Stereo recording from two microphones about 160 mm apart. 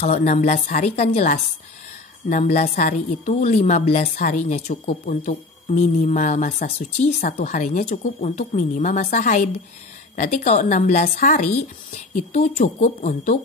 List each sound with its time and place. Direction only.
0.0 s a woman's voice: 45° left (ahead or behind)